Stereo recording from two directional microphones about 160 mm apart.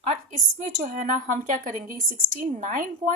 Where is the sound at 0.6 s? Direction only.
55° right (ahead or behind).